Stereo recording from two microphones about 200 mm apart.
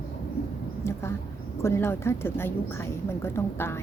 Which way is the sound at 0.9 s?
10° left (ahead or behind).